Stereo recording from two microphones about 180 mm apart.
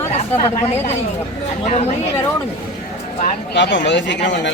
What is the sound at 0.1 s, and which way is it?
Speech, 35° left (ahead or behind).